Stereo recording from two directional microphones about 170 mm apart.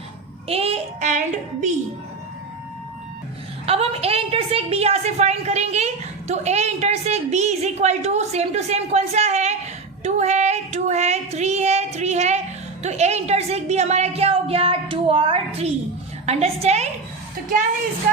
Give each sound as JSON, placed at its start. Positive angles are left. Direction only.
{"t": 0.4, "sound": "child singing", "side_deg": -35}
{"t": 3.7, "sound": "a woman's voice", "side_deg": -35}